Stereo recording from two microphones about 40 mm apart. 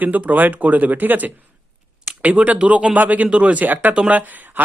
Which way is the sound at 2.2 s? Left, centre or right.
Right.